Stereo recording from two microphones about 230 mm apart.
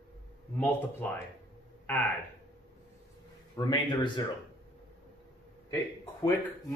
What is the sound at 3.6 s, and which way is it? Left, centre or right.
Speech, centre.